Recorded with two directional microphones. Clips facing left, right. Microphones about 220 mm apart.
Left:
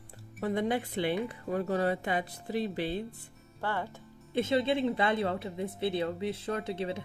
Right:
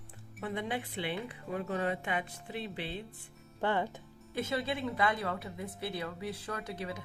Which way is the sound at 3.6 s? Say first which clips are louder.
Right 3 dB; 20° right (ahead or behind).